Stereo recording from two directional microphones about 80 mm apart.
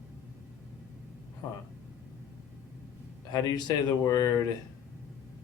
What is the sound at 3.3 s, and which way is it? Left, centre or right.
Speech, left.